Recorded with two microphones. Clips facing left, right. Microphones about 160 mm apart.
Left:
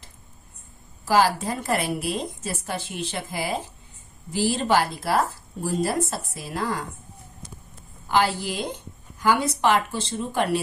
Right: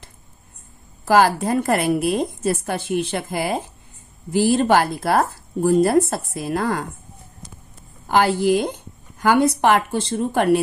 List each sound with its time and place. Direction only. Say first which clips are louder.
1.0 s a woman's voice: right 5 dB; 55° right (ahead or behind)
8.1 s a woman's voice: right 6 dB; 55° right (ahead or behind)